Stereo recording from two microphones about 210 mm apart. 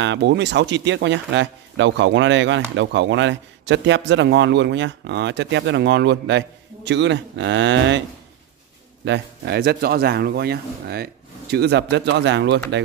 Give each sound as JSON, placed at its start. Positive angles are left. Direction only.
{"t": 0.0, "sound": "speech", "side_deg": -55}
{"t": 9.0, "sound": "speech", "side_deg": -55}